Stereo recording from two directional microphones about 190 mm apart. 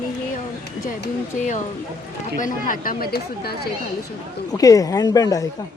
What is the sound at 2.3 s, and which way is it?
Speech, 45° left (ahead or behind).